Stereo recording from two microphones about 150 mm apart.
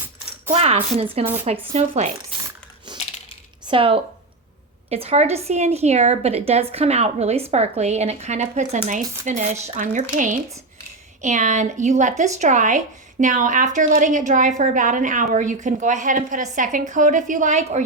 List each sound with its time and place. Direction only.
0.5 s speech: 40° right (ahead or behind)
1.2 s speech: 15° right (ahead or behind)
1.7 s a woman's voice: 50° right (ahead or behind)
3.7 s a woman's voice: 35° right (ahead or behind)